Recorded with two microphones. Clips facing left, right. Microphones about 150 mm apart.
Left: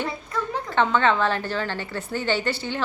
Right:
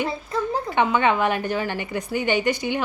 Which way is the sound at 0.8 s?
15° right (ahead or behind).